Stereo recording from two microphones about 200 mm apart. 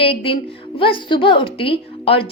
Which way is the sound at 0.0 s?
30° left (ahead or behind).